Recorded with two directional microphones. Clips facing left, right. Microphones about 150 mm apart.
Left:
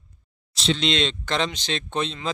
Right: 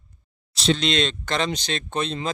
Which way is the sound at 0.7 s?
45° right (ahead or behind).